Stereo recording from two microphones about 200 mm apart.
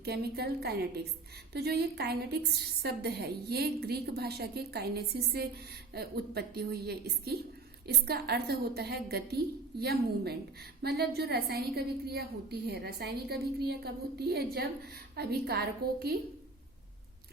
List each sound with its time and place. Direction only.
0.0 s a woman's voice: 50° right (ahead or behind)